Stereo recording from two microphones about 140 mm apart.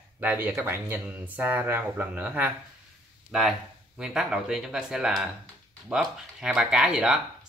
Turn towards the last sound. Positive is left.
turn(degrees=-5)  # may be behind; listen again after turning